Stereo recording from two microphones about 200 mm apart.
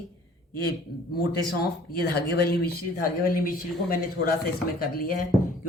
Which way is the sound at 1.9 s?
50° left (ahead or behind).